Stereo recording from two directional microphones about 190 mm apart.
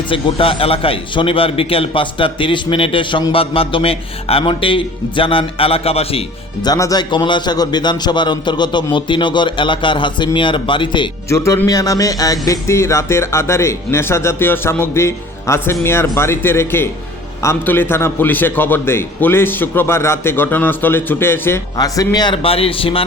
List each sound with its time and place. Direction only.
0.1 s a man's voice: 30° left (ahead or behind)